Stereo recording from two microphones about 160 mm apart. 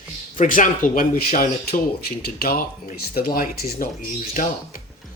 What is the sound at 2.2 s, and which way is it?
Speech, 65° left (ahead or behind).